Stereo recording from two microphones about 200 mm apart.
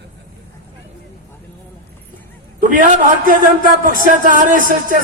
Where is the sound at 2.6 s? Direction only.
40° right (ahead or behind).